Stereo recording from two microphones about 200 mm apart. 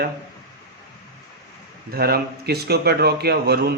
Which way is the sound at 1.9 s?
50° right (ahead or behind).